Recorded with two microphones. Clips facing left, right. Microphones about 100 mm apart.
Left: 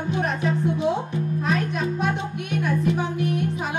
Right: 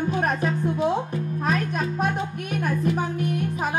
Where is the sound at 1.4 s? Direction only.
45° right (ahead or behind).